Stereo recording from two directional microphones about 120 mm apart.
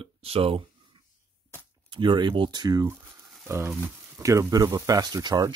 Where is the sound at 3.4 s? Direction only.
20° right (ahead or behind).